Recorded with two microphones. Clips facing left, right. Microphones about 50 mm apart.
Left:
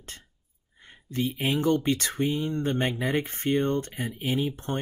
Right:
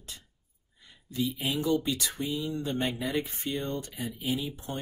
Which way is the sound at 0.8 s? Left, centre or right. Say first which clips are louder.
Left 2 dB; left.